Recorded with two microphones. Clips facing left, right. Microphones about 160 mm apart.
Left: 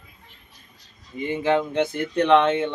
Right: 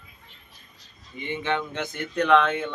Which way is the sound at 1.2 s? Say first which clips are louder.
Left 6 dB; 35° left (ahead or behind).